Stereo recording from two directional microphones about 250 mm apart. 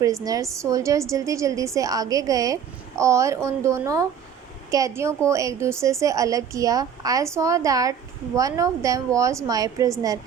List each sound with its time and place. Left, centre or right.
0.0 s a woman's voice: centre